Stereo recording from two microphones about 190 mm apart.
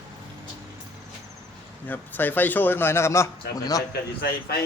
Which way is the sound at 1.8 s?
10° left (ahead or behind).